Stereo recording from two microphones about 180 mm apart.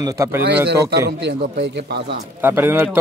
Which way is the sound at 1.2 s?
70° right (ahead or behind).